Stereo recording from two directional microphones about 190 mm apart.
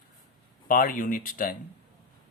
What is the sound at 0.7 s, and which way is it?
Speech, 45° left (ahead or behind).